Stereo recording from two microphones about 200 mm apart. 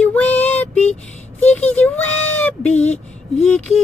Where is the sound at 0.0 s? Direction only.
10° left (ahead or behind).